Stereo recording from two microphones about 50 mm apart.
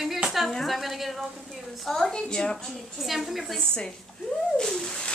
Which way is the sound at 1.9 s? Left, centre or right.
Centre.